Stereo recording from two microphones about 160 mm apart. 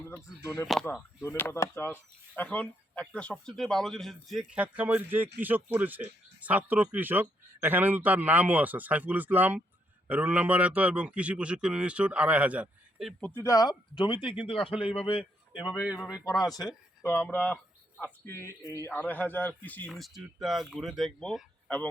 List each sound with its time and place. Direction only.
0.0 s a sound: 15° left (ahead or behind)
0.4 s speech: 20° left (ahead or behind); by 13.3 s centre (ahead or behind)
13.3 s a man's voice: 20° left (ahead or behind); by 15.2 s 35° left (ahead or behind)
15.2 s speech: 5° right (ahead or behind)
17.0 s speech: 15° left (ahead or behind)
19.9 s speech: centre (ahead or behind)